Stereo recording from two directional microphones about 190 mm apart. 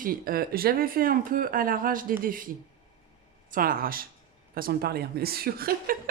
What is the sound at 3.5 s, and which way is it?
A woman's voice, 45° right (ahead or behind).